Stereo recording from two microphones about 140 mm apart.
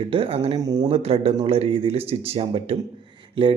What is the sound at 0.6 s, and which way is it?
Speech, 30° right (ahead or behind).